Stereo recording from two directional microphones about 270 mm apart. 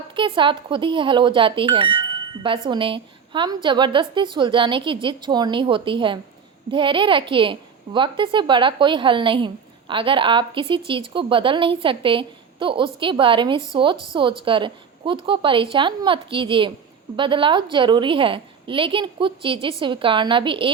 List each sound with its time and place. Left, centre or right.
0.2 s speech: centre